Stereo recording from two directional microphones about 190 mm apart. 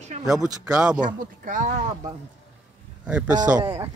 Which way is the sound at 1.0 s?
45° right (ahead or behind).